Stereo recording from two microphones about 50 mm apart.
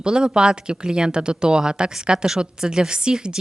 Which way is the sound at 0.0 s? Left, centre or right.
Centre.